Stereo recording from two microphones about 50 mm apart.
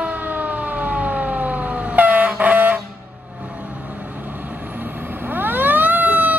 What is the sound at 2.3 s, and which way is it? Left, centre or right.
Vehicle, right.